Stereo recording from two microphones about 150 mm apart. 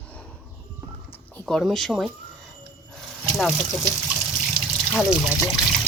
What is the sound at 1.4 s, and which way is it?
Speech, centre (ahead or behind).